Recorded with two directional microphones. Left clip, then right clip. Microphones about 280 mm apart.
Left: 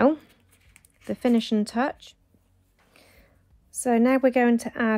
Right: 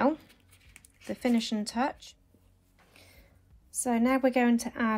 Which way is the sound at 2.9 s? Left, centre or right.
Left.